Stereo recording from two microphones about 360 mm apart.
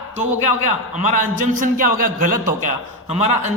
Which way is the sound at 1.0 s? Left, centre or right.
Right.